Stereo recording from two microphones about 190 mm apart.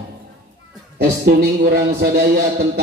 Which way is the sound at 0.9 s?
55° right (ahead or behind).